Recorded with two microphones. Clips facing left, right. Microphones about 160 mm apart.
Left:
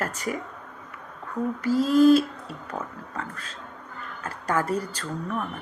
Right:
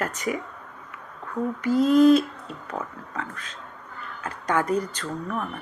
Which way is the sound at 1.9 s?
5° left (ahead or behind).